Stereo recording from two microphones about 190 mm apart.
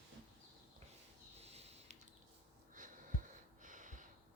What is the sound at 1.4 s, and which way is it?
Sniff, 35° right (ahead or behind).